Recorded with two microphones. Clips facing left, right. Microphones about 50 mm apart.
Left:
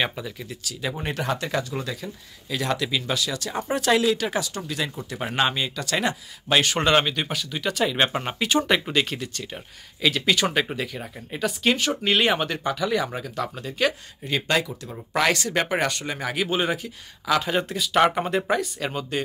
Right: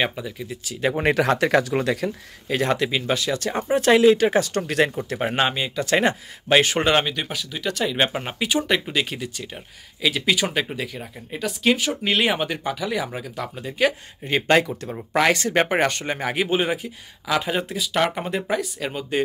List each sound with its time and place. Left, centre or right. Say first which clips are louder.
0.0 s speech: right 2 dB; centre
0.7 s speech: right 7 dB; right
0.9 s speech: right 9 dB; right
2.4 s speech: right 5 dB; right
2.7 s speech: even; right
4.6 s speech: right 8 dB; right
5.1 s speech: right 2 dB; right
5.9 s speech: right 7 dB; right
6.9 s speech: even; centre
14.2 s speech: right 5 dB; right
14.9 s speech: even; centre
15.3 s speech: right 4 dB; right
17.5 s speech: even; centre